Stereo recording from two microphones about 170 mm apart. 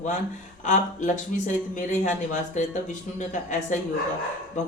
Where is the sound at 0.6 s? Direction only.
45° left (ahead or behind).